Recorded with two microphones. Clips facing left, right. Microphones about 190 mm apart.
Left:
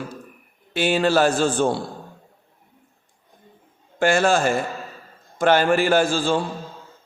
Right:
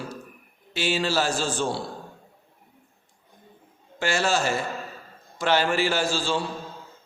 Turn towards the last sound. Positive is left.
turn(degrees=50)  # may be behind; listen again after turning